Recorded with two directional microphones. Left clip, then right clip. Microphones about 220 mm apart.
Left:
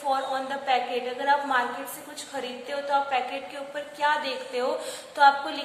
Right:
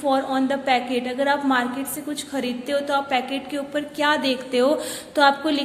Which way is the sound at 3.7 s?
40° right (ahead or behind).